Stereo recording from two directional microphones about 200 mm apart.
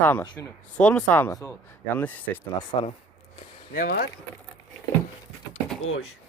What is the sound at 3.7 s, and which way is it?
Speech, 45° left (ahead or behind).